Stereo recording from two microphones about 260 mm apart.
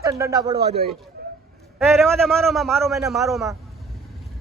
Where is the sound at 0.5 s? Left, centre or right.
Right.